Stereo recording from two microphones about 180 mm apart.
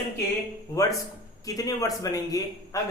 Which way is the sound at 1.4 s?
20° left (ahead or behind).